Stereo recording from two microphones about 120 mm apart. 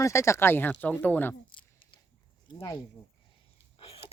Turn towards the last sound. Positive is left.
turn(degrees=50)  # may be behind; listen again after turning